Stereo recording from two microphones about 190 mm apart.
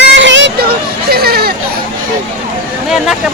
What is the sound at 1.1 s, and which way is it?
Speech, 55° right (ahead or behind).